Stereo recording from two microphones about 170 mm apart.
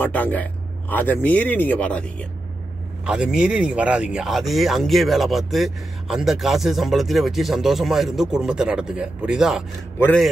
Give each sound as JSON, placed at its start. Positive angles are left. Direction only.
{"t": 0.0, "sound": "speech", "side_deg": 10}
{"t": 3.1, "sound": "speech", "side_deg": -5}
{"t": 9.9, "sound": "a man's voice", "side_deg": 10}